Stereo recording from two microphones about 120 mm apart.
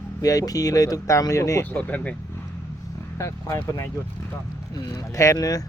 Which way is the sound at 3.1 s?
25° left (ahead or behind).